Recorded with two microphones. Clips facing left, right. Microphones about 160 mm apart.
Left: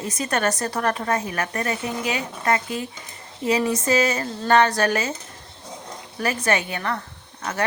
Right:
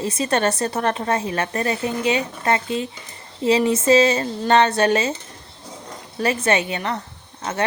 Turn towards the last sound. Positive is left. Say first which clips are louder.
# right 2 dB
turn(degrees=-25)  # may be behind; listen again after turning